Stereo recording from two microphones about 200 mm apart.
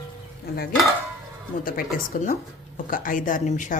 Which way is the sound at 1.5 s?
40° left (ahead or behind).